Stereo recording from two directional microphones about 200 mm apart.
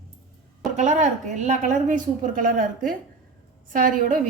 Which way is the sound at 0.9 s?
35° right (ahead or behind).